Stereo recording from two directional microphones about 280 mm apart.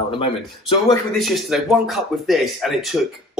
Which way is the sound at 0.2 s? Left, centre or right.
Centre.